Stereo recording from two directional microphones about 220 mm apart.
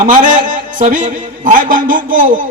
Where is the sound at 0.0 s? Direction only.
35° right (ahead or behind).